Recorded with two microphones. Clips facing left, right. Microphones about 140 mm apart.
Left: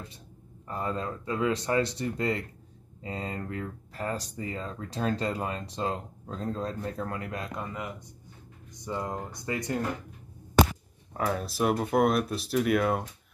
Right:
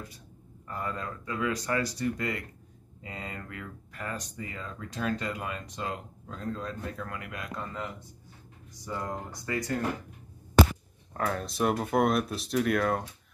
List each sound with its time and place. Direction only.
0.7 s speech: 25° left (ahead or behind)
7.5 s speech: 15° left (ahead or behind)
11.1 s speech: 5° left (ahead or behind)